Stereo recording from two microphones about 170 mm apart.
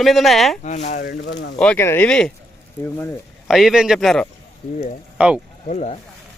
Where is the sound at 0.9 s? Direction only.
75° left (ahead or behind); by 1.5 s 90° left.